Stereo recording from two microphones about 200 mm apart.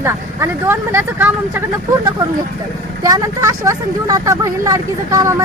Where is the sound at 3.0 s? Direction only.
15° right (ahead or behind).